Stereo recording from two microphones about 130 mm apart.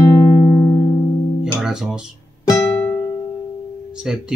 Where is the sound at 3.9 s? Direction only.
5° right (ahead or behind).